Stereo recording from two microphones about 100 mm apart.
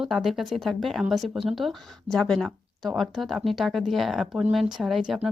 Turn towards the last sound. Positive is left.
turn(degrees=0)  # may be behind; listen again after turning